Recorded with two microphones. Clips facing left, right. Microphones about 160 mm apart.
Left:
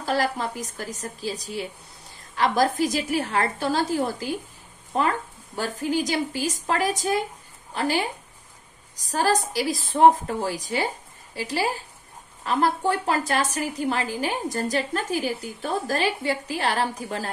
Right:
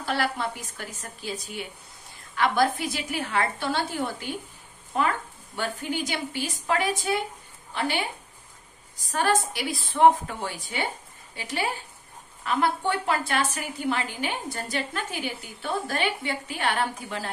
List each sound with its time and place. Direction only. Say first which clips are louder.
0.0 s a woman's voice: left 3 dB; 40° left (ahead or behind)
9.1 s a woman's voice: left 2 dB; 35° left (ahead or behind)